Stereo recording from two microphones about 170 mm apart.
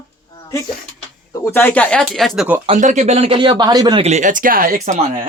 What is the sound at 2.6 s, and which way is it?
Speech, 45° right (ahead or behind).